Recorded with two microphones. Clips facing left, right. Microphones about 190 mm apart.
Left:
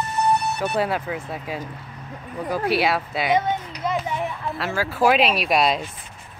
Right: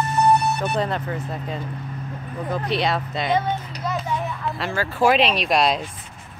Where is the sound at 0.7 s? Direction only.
5° left (ahead or behind).